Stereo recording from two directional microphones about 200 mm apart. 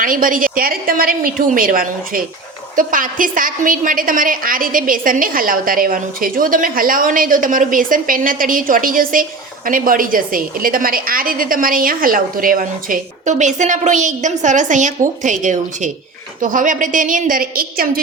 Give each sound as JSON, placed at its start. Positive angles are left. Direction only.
{"t": 0.0, "sound": "a woman's voice", "side_deg": -45}